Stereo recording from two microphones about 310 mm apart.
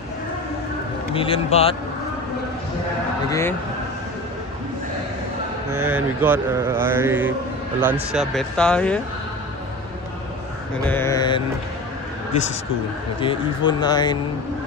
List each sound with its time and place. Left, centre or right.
1.1 s speech: centre
3.3 s speech: centre
5.8 s mantra: centre
7.8 s speech: centre
10.9 s speech: centre
13.2 s speech: centre